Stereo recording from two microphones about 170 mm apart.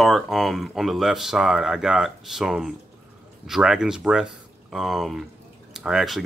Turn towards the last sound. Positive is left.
turn(degrees=0)  # may be behind; listen again after turning